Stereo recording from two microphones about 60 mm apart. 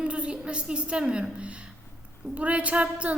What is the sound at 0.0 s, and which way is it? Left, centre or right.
A woman's voice, centre.